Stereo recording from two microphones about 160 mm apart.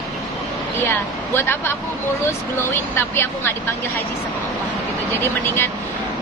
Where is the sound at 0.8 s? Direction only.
15° left (ahead or behind).